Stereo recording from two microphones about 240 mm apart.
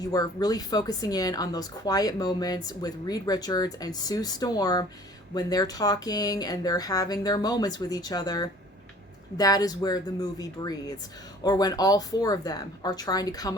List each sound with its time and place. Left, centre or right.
0.0 s speech: centre